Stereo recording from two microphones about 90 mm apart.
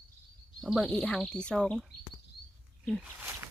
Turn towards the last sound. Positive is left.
turn(degrees=-25)  # may be behind; listen again after turning